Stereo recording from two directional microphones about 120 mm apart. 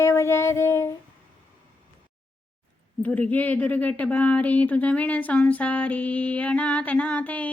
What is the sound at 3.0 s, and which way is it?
Speech, 10° left (ahead or behind).